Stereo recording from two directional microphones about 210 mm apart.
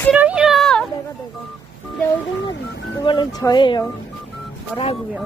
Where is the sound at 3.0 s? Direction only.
20° left (ahead or behind).